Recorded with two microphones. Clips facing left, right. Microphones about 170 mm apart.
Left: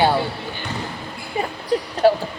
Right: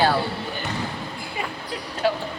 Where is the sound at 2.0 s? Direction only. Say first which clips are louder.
Left 7 dB; 40° left (ahead or behind).